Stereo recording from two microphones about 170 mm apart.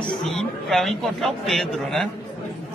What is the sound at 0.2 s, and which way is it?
A man's voice, 5° left (ahead or behind).